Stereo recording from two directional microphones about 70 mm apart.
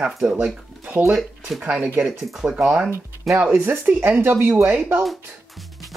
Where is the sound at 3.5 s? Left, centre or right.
Right.